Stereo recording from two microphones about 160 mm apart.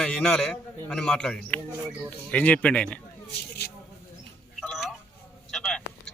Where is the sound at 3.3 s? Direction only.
90° left.